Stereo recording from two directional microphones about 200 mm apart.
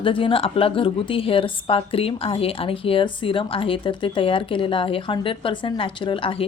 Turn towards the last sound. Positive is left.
turn(degrees=25)  # may be behind; listen again after turning